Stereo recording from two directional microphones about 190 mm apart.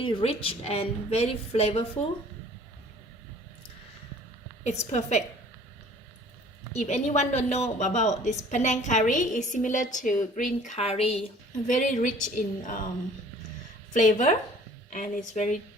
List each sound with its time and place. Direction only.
0.0 s a woman's voice: 30° left (ahead or behind)
4.6 s a woman's voice: 35° left (ahead or behind)
6.7 s a woman's voice: 35° left (ahead or behind)
13.9 s a woman's voice: 40° left (ahead or behind)